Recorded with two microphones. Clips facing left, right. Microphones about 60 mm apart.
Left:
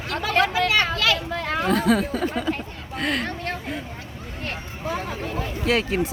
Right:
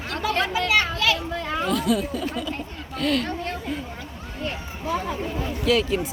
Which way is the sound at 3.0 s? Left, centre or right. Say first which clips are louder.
Right 2 dB; left.